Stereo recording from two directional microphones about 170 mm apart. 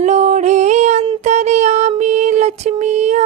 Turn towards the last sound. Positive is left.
turn(degrees=-45)  # may be behind; listen again after turning